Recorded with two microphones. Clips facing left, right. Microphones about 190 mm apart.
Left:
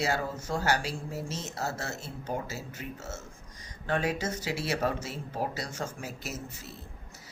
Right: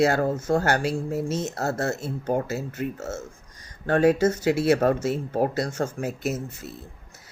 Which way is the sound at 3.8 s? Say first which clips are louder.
Right 11 dB; 45° right (ahead or behind).